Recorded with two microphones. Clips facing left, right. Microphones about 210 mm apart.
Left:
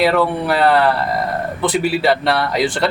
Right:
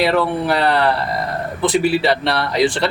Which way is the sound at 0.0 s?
Centre (ahead or behind).